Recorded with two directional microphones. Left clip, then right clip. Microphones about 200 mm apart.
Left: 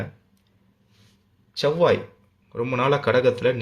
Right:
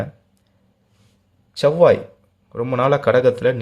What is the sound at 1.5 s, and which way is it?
Speech, 15° right (ahead or behind).